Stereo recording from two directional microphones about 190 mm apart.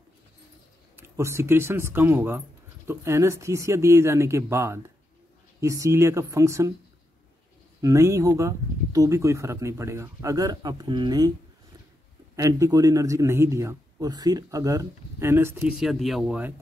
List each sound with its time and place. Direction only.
0.9 s speech: 15° right (ahead or behind)
7.8 s speech: 15° right (ahead or behind)
12.4 s speech: 15° right (ahead or behind)
15.7 s speech: centre (ahead or behind)